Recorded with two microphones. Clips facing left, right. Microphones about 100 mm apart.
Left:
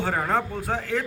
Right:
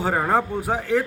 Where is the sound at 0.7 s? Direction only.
15° right (ahead or behind).